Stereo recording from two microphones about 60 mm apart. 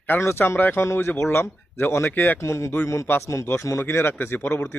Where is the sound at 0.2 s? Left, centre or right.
Left.